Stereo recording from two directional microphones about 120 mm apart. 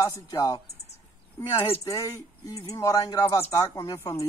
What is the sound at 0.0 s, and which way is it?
Speech, 30° left (ahead or behind).